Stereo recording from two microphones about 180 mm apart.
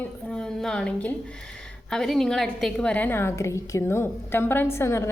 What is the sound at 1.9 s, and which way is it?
A woman's voice, centre (ahead or behind).